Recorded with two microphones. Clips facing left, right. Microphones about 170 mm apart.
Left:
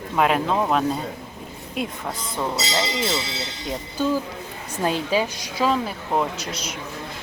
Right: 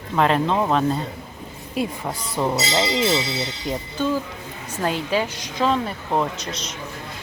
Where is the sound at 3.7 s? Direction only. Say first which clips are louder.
Left 1 dB; 10° left (ahead or behind).